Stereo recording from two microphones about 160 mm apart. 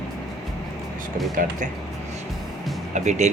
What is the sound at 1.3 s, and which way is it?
Speech, 55° right (ahead or behind).